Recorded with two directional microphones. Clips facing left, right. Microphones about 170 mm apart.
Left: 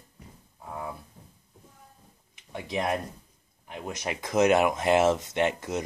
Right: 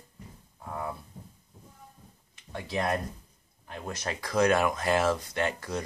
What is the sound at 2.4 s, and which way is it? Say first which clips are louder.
Speech: left 1 dB; 15° left (ahead or behind).